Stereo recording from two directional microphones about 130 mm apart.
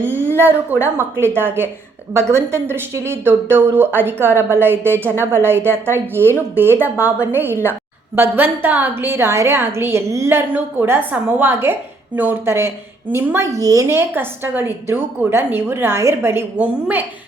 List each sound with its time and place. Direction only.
0.0 s a woman's voice: 15° right (ahead or behind)
7.0 s a woman's voice: 20° left (ahead or behind)
7.3 s a woman's voice: 15° right (ahead or behind)